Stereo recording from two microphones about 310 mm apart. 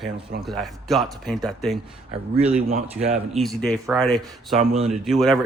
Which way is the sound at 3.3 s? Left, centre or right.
Centre.